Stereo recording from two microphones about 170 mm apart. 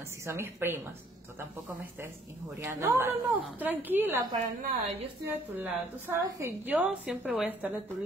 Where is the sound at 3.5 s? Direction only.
10° right (ahead or behind).